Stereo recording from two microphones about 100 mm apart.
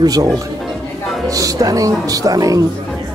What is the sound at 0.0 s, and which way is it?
Speech, 40° right (ahead or behind).